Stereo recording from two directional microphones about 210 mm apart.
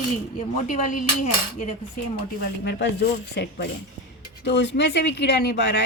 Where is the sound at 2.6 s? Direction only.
55° left (ahead or behind).